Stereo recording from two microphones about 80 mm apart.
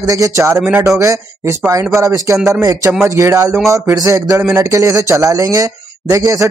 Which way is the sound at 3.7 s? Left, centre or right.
Right.